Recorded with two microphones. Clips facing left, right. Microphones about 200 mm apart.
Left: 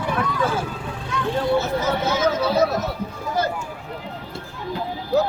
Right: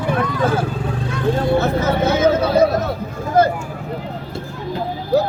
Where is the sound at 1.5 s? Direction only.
55° right (ahead or behind).